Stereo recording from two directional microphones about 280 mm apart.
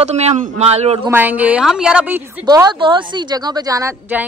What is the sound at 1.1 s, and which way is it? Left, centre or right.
Speech, centre.